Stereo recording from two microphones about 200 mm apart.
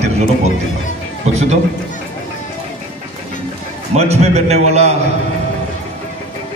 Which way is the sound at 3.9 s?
30° right (ahead or behind).